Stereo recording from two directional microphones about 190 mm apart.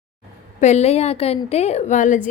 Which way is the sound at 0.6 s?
35° left (ahead or behind).